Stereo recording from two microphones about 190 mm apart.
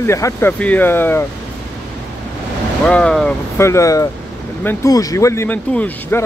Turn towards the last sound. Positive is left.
turn(degrees=10)  # may be behind; listen again after turning